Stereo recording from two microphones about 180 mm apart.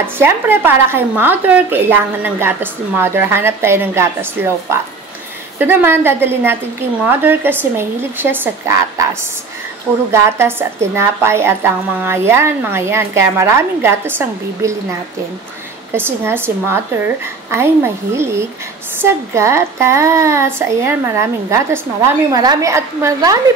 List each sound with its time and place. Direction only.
0.0 s speech: 10° right (ahead or behind)
15.9 s speech: 10° right (ahead or behind)